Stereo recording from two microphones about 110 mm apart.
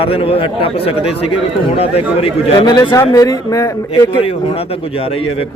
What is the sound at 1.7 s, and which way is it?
Speech, 65° left (ahead or behind).